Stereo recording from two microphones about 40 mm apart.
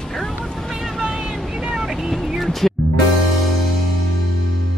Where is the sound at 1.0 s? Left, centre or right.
Right.